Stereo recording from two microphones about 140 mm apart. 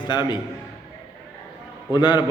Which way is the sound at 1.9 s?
30° left (ahead or behind).